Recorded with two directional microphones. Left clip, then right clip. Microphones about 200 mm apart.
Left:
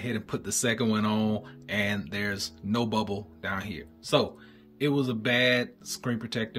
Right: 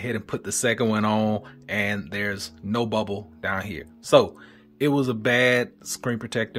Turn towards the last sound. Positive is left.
turn(degrees=-15)  # may be behind; listen again after turning